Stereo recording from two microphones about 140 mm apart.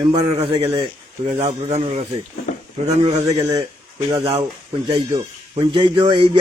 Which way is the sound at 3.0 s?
50° right (ahead or behind).